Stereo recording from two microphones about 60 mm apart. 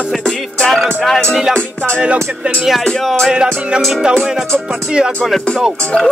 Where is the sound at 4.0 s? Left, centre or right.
Centre.